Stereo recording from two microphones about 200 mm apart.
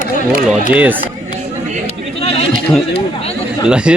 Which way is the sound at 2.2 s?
30° left (ahead or behind).